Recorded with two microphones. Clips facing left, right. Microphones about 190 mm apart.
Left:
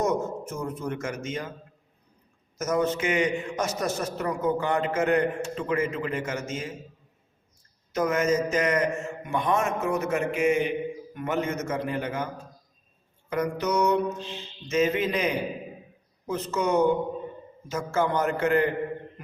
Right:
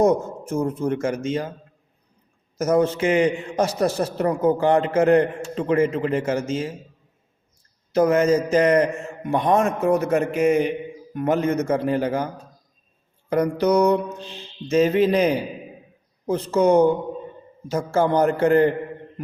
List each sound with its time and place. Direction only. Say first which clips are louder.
0.0 s a man's voice: right 7 dB; 30° right (ahead or behind)
2.6 s a man's voice: right 6 dB; 30° right (ahead or behind)
7.9 s a man's voice: right 7 dB; 35° right (ahead or behind)
13.3 s a man's voice: right 7 dB; 35° right (ahead or behind)